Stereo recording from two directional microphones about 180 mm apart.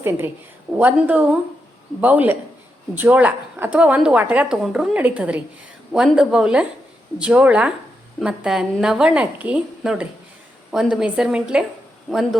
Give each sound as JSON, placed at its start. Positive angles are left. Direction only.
{"t": 0.0, "sound": "a woman's voice", "side_deg": -15}